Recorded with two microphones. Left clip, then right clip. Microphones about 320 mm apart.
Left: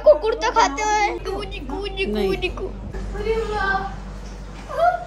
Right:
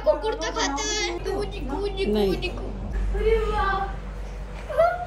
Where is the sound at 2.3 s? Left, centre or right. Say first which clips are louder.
Left 3 dB; centre.